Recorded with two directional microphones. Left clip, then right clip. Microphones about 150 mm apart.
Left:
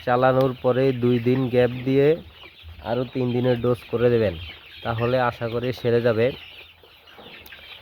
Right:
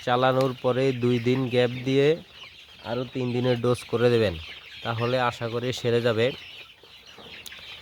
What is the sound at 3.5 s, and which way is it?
Speech, 15° right (ahead or behind).